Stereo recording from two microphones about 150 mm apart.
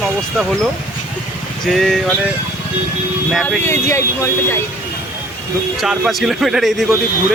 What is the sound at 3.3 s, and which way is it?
Speech, centre (ahead or behind).